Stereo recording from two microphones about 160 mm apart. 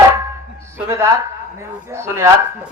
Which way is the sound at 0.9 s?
15° right (ahead or behind).